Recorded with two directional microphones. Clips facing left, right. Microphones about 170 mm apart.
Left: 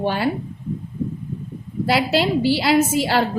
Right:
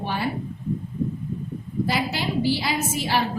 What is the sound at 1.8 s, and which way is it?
A woman's voice, 80° left.